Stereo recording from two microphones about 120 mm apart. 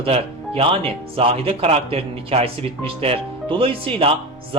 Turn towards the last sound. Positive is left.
turn(degrees=-50)  # may be behind; listen again after turning